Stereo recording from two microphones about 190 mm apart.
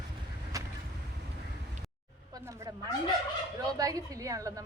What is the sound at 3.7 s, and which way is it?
Speech, 20° right (ahead or behind).